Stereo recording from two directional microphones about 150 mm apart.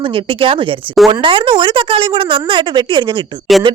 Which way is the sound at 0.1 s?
35° right (ahead or behind).